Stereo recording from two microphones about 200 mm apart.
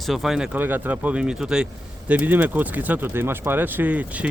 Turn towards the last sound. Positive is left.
turn(degrees=-5)  # may be behind; listen again after turning